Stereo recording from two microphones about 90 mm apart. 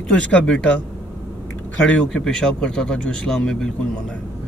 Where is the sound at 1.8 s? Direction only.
15° left (ahead or behind).